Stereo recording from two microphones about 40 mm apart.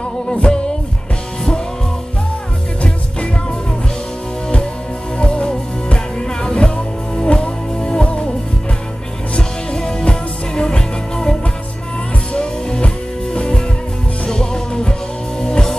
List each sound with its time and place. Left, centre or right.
0.3 s music: left
5.2 s music: left
9.3 s music: centre